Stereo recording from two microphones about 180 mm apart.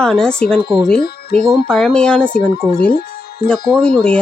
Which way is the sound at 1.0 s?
55° left (ahead or behind).